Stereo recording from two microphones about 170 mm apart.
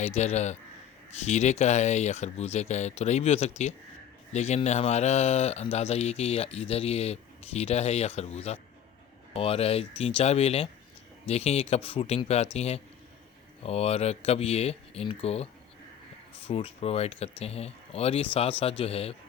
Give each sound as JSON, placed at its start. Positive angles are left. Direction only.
{"t": 0.0, "sound": "speech", "side_deg": 40}
{"t": 16.5, "sound": "speech", "side_deg": 35}